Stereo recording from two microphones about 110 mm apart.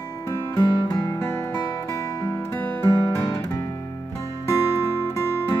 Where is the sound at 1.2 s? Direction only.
25° left (ahead or behind).